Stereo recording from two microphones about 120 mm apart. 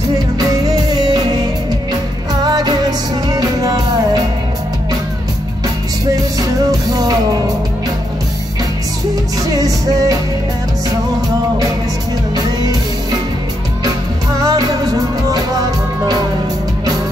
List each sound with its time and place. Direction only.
0.4 s music: 35° right (ahead or behind)
6.6 s music: 35° right (ahead or behind)
9.5 s music: 30° right (ahead or behind)
14.4 s music: 30° right (ahead or behind)